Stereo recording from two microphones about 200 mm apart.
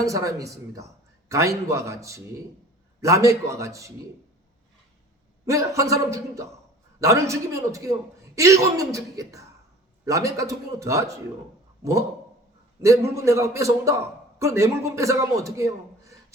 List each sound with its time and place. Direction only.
0.0 s a man's voice: 15° right (ahead or behind)
5.5 s a man's voice: 15° right (ahead or behind)
11.8 s a sound: 15° right (ahead or behind)
13.1 s a man's voice: 15° right (ahead or behind)